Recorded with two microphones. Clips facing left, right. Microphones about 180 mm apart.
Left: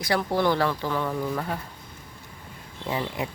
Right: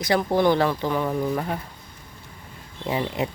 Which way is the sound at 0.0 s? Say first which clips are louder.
Right 4 dB; 20° right (ahead or behind).